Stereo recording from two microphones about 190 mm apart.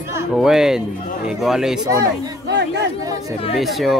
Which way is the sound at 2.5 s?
65° right (ahead or behind).